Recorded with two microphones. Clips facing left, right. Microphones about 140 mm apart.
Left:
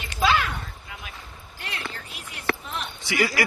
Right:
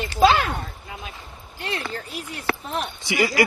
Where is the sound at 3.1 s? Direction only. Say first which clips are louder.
Right 4 dB; 20° right (ahead or behind).